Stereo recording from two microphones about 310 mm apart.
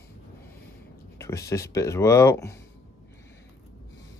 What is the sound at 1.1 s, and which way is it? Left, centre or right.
Speech, centre.